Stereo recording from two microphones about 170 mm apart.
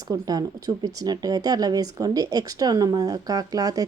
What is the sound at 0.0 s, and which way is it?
Speech, 20° right (ahead or behind).